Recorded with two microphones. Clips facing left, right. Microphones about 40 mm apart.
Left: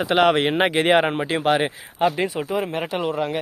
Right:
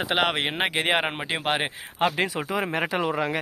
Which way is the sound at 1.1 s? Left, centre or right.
Centre.